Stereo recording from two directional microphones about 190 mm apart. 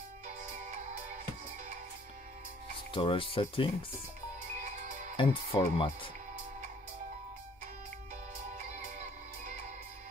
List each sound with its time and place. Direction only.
2.9 s speech: 25° left (ahead or behind)
5.1 s speech: 25° left (ahead or behind)